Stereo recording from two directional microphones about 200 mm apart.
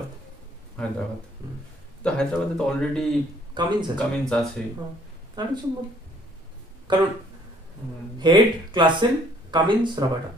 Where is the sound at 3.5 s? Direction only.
20° right (ahead or behind).